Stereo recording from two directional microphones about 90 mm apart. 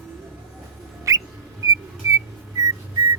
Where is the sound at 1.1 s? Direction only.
35° right (ahead or behind).